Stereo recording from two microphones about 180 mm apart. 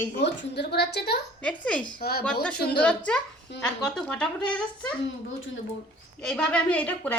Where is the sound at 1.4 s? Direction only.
5° left (ahead or behind).